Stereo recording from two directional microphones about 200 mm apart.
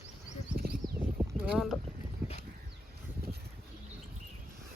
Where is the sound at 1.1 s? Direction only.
5° right (ahead or behind).